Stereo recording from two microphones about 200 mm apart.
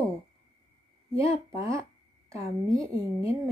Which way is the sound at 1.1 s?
15° right (ahead or behind).